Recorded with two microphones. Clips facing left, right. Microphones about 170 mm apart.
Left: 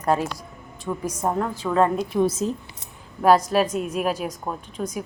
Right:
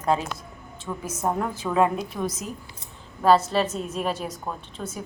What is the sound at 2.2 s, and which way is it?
Speech, 30° left (ahead or behind).